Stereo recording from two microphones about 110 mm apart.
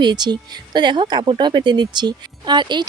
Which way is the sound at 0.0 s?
40° right (ahead or behind).